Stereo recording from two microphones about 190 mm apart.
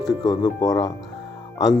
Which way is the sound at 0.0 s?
20° left (ahead or behind).